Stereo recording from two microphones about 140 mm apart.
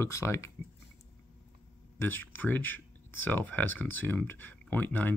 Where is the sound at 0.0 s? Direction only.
20° left (ahead or behind).